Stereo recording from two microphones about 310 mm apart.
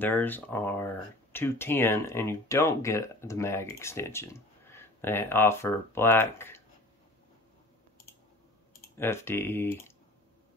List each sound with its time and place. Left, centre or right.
0.0 s speech: centre
8.9 s speech: centre